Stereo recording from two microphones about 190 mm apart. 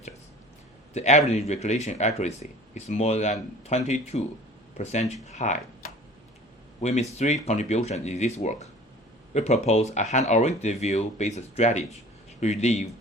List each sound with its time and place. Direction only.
0.9 s speech: 35° left (ahead or behind)
6.8 s speech: 35° left (ahead or behind)